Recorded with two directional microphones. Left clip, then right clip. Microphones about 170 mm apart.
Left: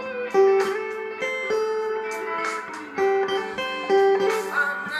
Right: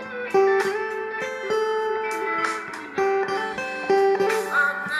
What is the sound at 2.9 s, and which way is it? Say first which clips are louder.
Music: left 1 dB; 30° right (ahead or behind).